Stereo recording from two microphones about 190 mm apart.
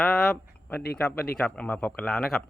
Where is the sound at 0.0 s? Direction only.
Centre (ahead or behind).